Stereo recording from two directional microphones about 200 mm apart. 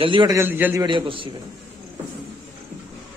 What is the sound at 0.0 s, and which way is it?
Speech, 25° right (ahead or behind).